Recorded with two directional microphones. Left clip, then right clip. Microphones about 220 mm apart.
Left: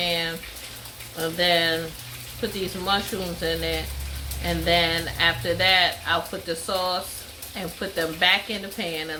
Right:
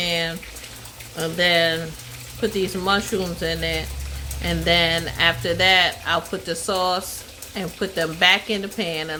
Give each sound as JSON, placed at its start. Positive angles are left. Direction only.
{"t": 0.0, "sound": "bathtub", "side_deg": -40}
{"t": 1.1, "sound": "speech", "side_deg": -40}